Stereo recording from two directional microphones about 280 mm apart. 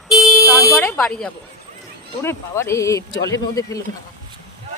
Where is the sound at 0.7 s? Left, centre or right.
Centre.